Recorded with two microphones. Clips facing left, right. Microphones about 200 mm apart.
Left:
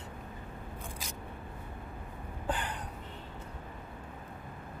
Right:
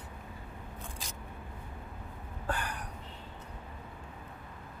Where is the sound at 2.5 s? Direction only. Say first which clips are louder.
Left 1 dB; 20° left (ahead or behind).